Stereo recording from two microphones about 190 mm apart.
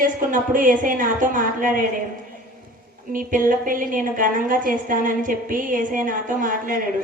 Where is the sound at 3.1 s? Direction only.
45° right (ahead or behind).